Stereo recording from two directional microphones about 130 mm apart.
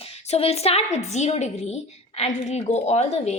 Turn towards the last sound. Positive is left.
turn(degrees=55)  # may be behind; listen again after turning